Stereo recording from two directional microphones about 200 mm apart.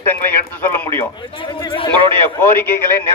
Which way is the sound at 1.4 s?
25° left (ahead or behind).